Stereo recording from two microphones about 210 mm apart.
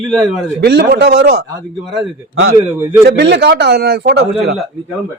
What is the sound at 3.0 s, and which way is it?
Speech, 55° right (ahead or behind).